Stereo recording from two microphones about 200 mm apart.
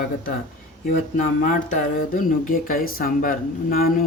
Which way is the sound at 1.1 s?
40° left (ahead or behind).